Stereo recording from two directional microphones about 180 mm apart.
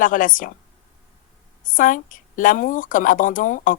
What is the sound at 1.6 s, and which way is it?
A woman's voice, 50° left (ahead or behind).